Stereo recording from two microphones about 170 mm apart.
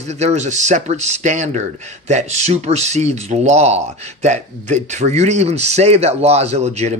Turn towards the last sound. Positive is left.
turn(degrees=-40)  # may be behind; listen again after turning